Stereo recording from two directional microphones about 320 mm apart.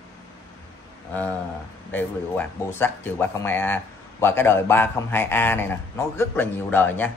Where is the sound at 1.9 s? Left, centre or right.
Centre.